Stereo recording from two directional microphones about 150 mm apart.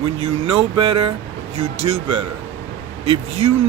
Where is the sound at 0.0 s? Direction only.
40° right (ahead or behind).